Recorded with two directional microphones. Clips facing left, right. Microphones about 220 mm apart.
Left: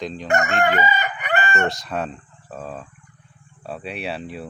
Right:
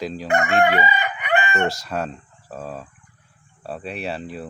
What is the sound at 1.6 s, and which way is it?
Speech, centre (ahead or behind).